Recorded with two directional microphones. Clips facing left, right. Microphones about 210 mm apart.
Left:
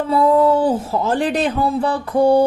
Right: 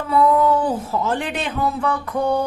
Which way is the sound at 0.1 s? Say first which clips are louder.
Left 2 dB; 30° left (ahead or behind).